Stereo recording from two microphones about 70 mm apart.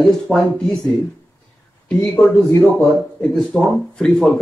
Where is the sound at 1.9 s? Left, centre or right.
Left.